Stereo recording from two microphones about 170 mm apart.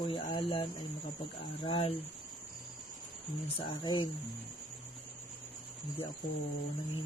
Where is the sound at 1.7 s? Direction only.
35° left (ahead or behind).